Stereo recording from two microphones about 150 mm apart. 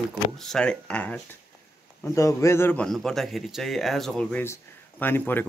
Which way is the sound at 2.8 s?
Centre (ahead or behind).